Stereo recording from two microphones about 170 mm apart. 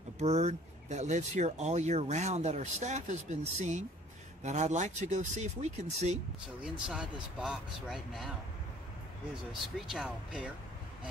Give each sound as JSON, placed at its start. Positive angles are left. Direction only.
{"t": 0.2, "sound": "speech", "side_deg": -40}
{"t": 6.6, "sound": "speech", "side_deg": -5}
{"t": 9.8, "sound": "speech", "side_deg": 0}